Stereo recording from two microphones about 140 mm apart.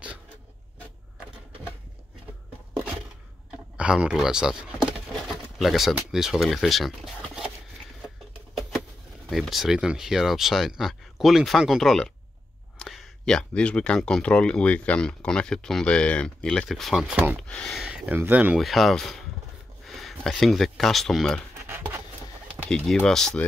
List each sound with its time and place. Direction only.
3.7 s speech: 5° right (ahead or behind)
5.6 s speech: centre (ahead or behind)
8.5 s a sound: centre (ahead or behind)
9.3 s speech: centre (ahead or behind)
17.8 s speech: 10° right (ahead or behind)
18.6 s speech: centre (ahead or behind)
21.6 s a sound: 15° right (ahead or behind)
22.7 s speech: 5° left (ahead or behind)